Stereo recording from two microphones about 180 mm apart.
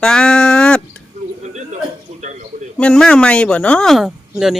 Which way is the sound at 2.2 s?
40° right (ahead or behind).